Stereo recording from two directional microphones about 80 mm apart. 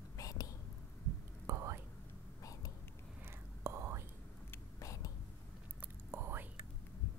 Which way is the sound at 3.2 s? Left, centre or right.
Right.